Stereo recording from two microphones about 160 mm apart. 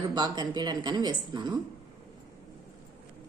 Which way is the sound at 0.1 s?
25° right (ahead or behind).